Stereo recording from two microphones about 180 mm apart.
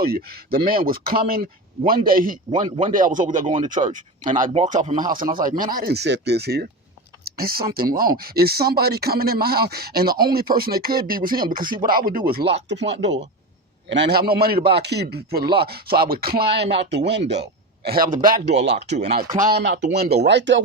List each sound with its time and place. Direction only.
0.0 s speech: 60° right (ahead or behind)
2.5 s speech: 25° right (ahead or behind)
2.8 s speech: 45° right (ahead or behind)
12.6 s speech: 75° right (ahead or behind)
13.9 s speech: 65° right (ahead or behind); by 20.6 s 80° right